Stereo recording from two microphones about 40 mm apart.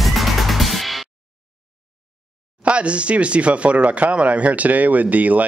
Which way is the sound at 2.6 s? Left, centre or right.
Right.